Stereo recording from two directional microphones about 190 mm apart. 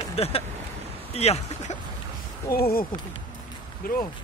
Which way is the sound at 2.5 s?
50° left (ahead or behind).